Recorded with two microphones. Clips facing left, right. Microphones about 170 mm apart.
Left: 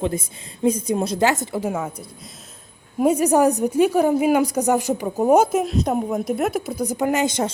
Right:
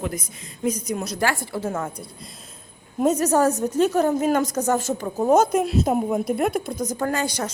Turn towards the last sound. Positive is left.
turn(degrees=20)  # may be behind; listen again after turning